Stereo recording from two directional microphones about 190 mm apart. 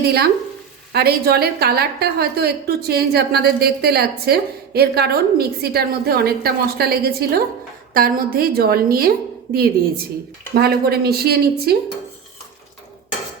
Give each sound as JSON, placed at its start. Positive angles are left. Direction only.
{"t": 0.0, "sound": "a woman's voice", "side_deg": -55}